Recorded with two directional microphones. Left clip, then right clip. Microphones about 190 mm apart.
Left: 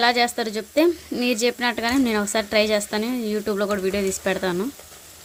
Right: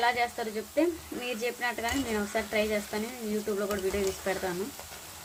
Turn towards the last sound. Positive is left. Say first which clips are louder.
# left 8 dB
turn(degrees=60)  # may be behind; listen again after turning